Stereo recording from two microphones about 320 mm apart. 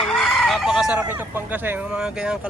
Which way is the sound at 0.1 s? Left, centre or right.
Centre.